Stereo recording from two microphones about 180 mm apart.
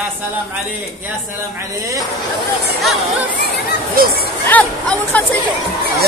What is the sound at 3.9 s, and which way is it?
Speech, 55° right (ahead or behind).